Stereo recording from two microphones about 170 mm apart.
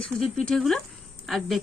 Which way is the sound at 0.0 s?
5° left (ahead or behind).